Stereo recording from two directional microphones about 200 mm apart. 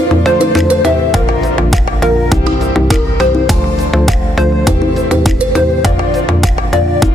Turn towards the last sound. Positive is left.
turn(degrees=0)  # may be behind; listen again after turning